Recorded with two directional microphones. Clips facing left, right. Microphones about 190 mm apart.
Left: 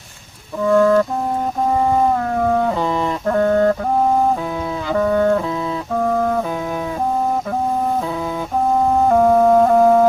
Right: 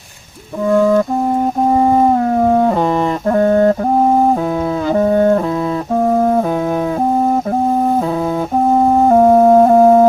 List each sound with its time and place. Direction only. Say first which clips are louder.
0.8 s music: right 1 dB; 20° right (ahead or behind)
1.7 s howl: right 4 dB; 25° right (ahead or behind)
3.2 s music: right 3 dB; 25° right (ahead or behind)
4.9 s music: right 3 dB; 25° right (ahead or behind)
9.0 s music: right 4 dB; 25° right (ahead or behind)